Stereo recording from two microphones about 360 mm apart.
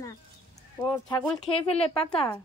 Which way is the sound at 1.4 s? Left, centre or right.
Centre.